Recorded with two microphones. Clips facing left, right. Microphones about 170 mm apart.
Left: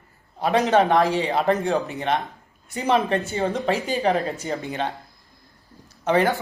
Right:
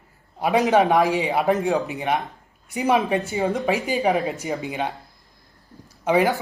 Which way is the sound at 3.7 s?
15° right (ahead or behind).